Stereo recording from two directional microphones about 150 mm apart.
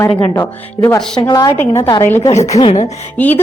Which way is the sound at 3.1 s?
10° left (ahead or behind).